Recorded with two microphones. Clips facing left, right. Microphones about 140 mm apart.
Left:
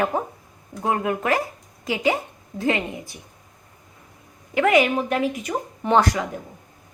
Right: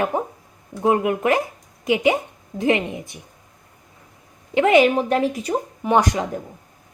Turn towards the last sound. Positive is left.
turn(degrees=-15)  # may be behind; listen again after turning